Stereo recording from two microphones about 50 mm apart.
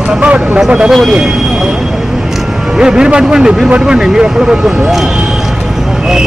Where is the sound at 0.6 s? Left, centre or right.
Centre.